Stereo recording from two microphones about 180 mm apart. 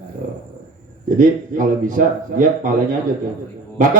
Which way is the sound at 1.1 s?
45° right (ahead or behind).